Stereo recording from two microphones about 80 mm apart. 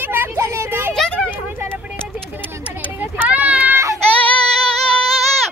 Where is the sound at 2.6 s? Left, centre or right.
Right.